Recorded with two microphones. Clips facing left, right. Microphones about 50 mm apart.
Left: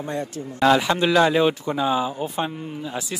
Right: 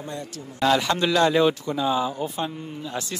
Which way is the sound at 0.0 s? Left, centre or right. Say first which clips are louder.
Left 6 dB; left.